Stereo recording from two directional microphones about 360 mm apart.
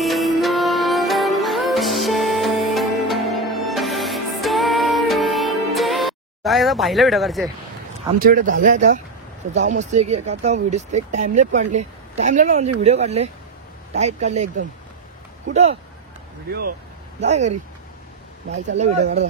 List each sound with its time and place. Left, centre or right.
0.0 s music: centre
8.2 s speech: right
15.5 s speech: centre
17.2 s speech: centre
18.9 s speech: centre